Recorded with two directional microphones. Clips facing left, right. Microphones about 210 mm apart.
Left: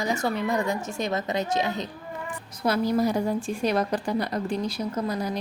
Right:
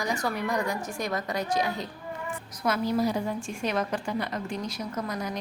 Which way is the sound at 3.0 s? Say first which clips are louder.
Left 3 dB; 45° left (ahead or behind).